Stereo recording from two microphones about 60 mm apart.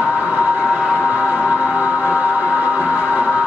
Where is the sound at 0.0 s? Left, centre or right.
Right.